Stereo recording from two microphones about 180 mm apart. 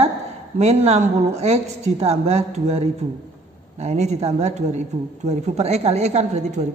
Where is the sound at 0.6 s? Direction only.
35° right (ahead or behind).